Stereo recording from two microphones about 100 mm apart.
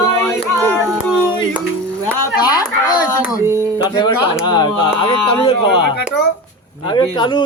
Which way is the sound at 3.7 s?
45° left (ahead or behind).